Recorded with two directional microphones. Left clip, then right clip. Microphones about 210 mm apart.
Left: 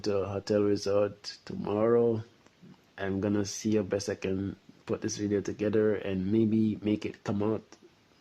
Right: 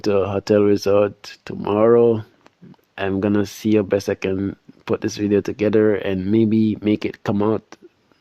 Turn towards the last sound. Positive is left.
turn(degrees=-40)  # may be behind; listen again after turning